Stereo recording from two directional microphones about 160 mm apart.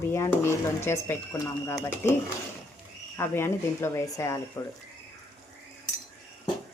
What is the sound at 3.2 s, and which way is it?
Speech, 15° left (ahead or behind).